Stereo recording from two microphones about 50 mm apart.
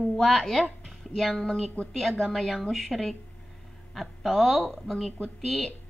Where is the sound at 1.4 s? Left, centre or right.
Centre.